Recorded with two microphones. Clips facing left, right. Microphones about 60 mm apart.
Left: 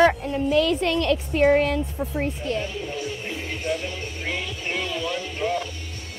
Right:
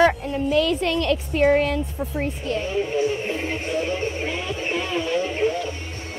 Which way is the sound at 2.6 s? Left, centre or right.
Right.